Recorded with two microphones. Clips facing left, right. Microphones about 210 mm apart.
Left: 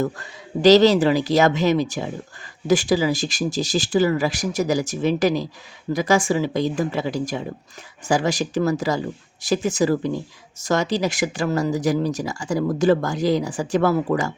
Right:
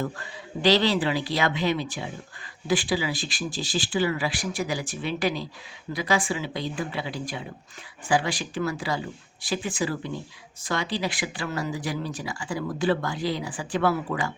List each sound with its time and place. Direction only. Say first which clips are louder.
0.0 s speech: left 6 dB; 40° left (ahead or behind)